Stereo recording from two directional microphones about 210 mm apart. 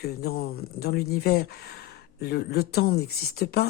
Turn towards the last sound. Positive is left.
turn(degrees=50)  # may be behind; listen again after turning